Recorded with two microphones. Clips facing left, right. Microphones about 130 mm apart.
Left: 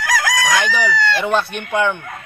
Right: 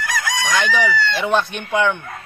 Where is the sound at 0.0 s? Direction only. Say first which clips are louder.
Left 4 dB; 90° left.